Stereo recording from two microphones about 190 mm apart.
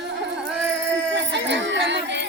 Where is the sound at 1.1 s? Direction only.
65° right (ahead or behind).